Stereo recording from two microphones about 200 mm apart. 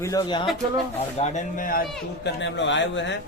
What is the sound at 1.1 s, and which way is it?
Speech, 35° left (ahead or behind).